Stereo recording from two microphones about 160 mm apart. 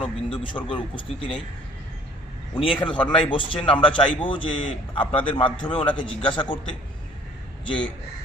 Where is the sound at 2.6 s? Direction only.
30° left (ahead or behind).